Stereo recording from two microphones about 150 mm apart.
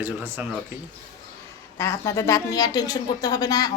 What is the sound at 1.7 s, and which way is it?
Speech, 20° left (ahead or behind).